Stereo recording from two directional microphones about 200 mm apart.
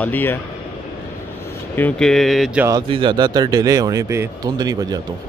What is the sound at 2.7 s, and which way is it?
Speech, 25° right (ahead or behind).